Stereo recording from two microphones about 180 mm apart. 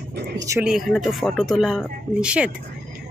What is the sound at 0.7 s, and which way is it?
Speech, centre (ahead or behind).